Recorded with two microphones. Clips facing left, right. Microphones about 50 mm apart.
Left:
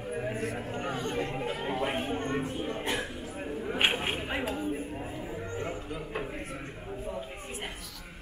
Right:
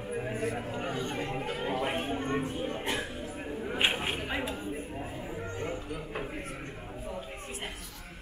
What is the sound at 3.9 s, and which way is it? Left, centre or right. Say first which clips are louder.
Speech: left 1 dB; centre.